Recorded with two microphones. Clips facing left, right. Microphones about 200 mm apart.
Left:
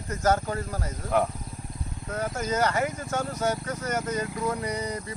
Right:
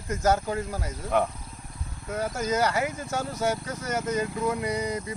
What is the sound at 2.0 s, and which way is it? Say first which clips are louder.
Speech: right 1 dB; 10° right (ahead or behind).